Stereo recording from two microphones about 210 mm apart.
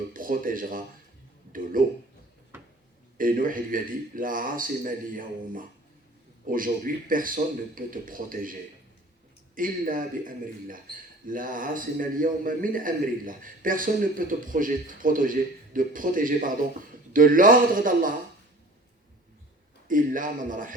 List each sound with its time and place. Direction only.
0.1 s a man's voice: 40° right (ahead or behind)
2.5 s a sound: 10° right (ahead or behind)
3.2 s a man's voice: 40° right (ahead or behind)
9.6 s a man's voice: 40° right (ahead or behind)
19.9 s a man's voice: 40° right (ahead or behind)